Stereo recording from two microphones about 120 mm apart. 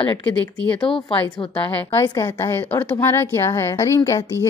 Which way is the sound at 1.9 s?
25° left (ahead or behind).